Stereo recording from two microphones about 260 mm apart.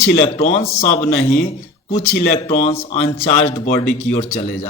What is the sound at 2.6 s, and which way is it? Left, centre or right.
Speech, left.